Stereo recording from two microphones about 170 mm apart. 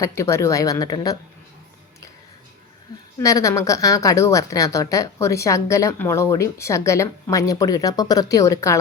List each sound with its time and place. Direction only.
0.0 s a woman's voice: 15° left (ahead or behind)
3.2 s a woman's voice: 20° left (ahead or behind)